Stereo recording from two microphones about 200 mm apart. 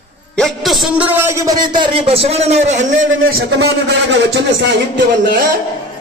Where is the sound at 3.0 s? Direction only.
90° right.